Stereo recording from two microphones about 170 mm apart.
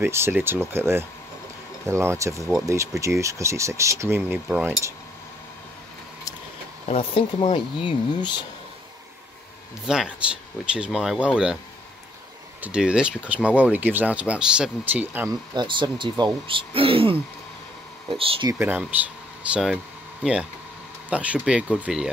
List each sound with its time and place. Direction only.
0.0 s speech: 15° right (ahead or behind)
6.9 s speech: 35° left (ahead or behind)
9.8 s speech: 5° right (ahead or behind)
12.6 s speech: 5° right (ahead or behind)
15.5 s speech: 30° right (ahead or behind)
18.5 s speech: 10° right (ahead or behind)